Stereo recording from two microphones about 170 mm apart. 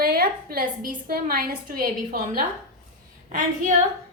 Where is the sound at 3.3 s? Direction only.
45° right (ahead or behind).